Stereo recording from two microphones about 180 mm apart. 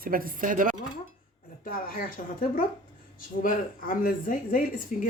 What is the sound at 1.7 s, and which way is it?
Speech, 50° left (ahead or behind).